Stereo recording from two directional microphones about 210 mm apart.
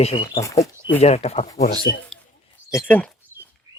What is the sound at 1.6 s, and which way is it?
Speech, 50° left (ahead or behind).